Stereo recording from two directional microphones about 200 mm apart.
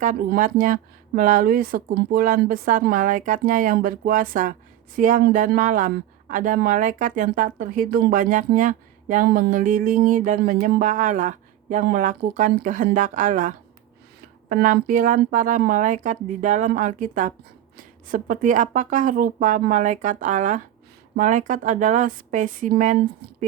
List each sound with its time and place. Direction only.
0.0 s a woman's voice: 40° right (ahead or behind)
14.5 s a woman's voice: 45° right (ahead or behind)